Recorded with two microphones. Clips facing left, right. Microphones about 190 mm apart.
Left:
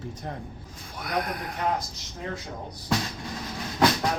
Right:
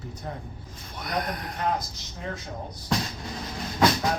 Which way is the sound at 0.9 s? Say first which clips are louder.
Left 1 dB; 5° left (ahead or behind).